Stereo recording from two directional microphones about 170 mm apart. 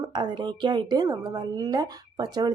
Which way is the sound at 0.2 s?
25° right (ahead or behind).